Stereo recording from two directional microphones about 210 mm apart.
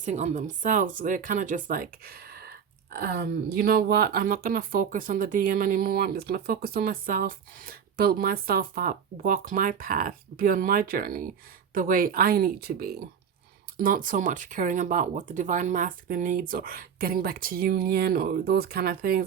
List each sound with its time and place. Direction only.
0.0 s speech: 35° right (ahead or behind)